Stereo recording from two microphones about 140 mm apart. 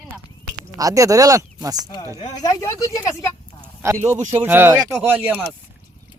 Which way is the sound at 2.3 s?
25° left (ahead or behind).